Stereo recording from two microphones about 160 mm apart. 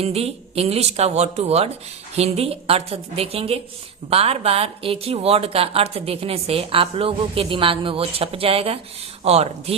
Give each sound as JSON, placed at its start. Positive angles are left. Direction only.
{"t": 0.0, "sound": "a woman's voice", "side_deg": -40}